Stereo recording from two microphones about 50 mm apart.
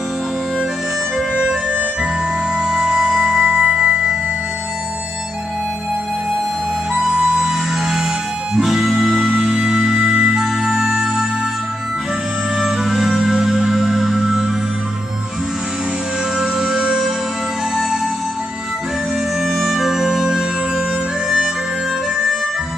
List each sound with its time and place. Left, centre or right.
1.4 s music: centre
3.3 s music: right
3.7 s music: centre
6.9 s music: centre
12.6 s music: centre
16.3 s music: centre
19.4 s music: centre